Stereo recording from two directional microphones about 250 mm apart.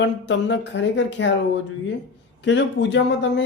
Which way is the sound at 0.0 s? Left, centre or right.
Left.